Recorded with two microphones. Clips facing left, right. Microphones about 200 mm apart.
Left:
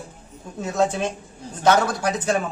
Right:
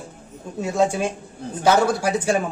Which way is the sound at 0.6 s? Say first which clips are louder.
Right 2 dB; 10° right (ahead or behind).